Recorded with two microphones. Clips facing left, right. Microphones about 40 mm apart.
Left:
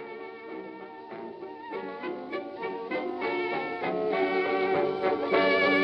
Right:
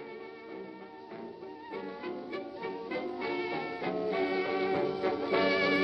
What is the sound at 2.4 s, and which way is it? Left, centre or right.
Music, centre.